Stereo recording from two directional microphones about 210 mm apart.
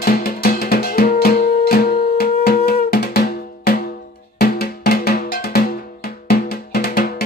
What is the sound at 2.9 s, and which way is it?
Drum, 50° left (ahead or behind).